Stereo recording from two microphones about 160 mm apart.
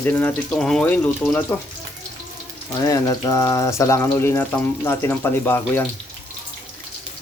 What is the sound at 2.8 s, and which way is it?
Speech, 25° left (ahead or behind).